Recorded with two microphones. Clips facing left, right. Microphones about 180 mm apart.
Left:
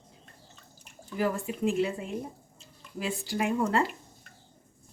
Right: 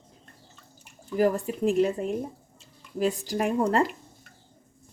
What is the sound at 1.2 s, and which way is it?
Speech, 40° right (ahead or behind).